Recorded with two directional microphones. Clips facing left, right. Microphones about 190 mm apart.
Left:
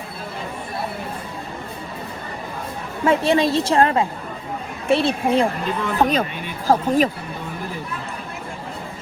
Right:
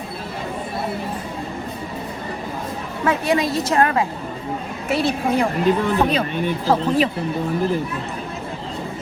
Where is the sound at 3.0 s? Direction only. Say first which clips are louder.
Left 2 dB; 30° left (ahead or behind).